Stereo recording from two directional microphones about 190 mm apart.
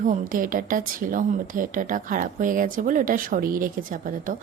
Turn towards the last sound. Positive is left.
turn(degrees=-45)  # may be behind; listen again after turning